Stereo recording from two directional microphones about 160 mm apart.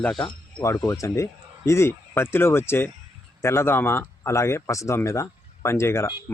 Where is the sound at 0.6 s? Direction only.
20° left (ahead or behind).